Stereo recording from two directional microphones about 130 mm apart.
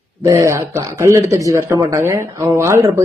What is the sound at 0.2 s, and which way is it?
Speech, 25° right (ahead or behind).